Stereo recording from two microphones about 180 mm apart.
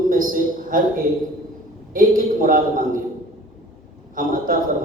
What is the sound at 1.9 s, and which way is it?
A man's voice, 50° right (ahead or behind).